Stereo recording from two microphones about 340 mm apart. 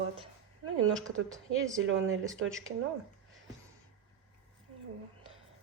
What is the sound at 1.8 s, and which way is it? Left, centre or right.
Speech, right.